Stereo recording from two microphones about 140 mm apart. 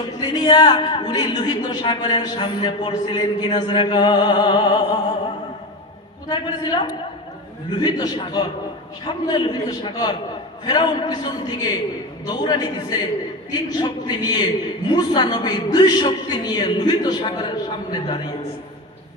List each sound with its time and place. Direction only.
0.0 s speech: 30° left (ahead or behind)
6.2 s a man's voice: 30° left (ahead or behind)